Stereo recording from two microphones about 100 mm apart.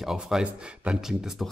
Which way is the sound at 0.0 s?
5° right (ahead or behind).